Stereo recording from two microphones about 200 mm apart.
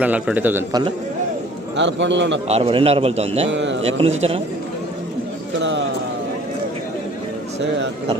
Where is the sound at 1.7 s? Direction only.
65° right (ahead or behind).